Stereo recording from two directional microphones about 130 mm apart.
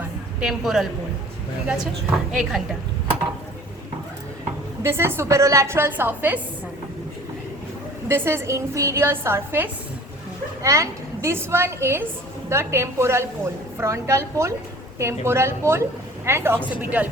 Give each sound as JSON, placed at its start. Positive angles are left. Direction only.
{"t": 0.3, "sound": "a woman's voice", "side_deg": -5}
{"t": 2.3, "sound": "a woman's voice", "side_deg": 0}
{"t": 4.8, "sound": "a woman's voice", "side_deg": -20}
{"t": 8.0, "sound": "a woman's voice", "side_deg": -20}